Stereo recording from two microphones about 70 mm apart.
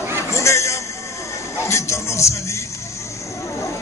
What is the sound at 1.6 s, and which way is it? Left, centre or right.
Music, left.